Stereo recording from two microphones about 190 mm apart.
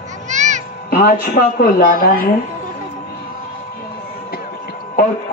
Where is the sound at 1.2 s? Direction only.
45° left (ahead or behind).